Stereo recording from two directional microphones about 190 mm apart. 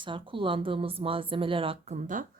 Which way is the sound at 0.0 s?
25° right (ahead or behind).